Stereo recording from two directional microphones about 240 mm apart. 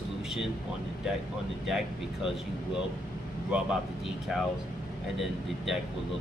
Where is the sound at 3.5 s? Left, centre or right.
Centre.